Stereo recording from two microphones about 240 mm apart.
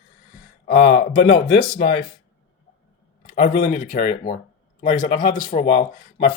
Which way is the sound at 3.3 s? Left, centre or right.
Left.